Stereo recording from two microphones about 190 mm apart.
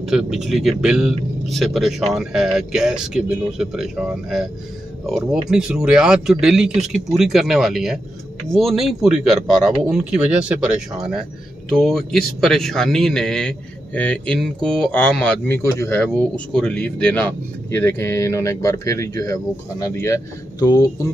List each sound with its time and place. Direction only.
0.0 s speech: centre (ahead or behind); by 21.1 s 15° left (ahead or behind)